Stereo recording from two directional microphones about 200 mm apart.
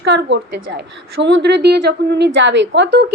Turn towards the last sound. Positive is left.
turn(degrees=-60)  # may be behind; listen again after turning